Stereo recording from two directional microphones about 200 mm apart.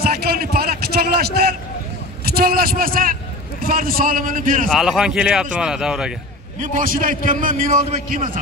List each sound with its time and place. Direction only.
0.0 s a sound: 50° right (ahead or behind)
2.2 s a man's voice: 50° right (ahead or behind)
4.6 s speech: centre (ahead or behind)
6.6 s a man's voice: 40° right (ahead or behind)